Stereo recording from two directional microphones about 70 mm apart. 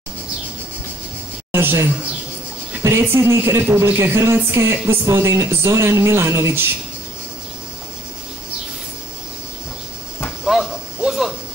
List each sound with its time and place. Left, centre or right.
1.5 s a man's voice: right
3.1 s speech: right
10.4 s a sound: centre